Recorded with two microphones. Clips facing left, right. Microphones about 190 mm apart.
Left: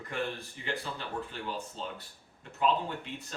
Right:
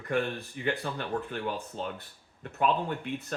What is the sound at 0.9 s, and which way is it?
Speech, 55° right (ahead or behind).